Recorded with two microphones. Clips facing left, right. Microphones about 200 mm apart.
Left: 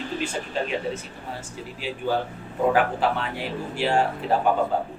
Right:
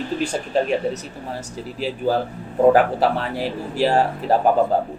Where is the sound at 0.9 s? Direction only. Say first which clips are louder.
Right 5 dB; 40° right (ahead or behind).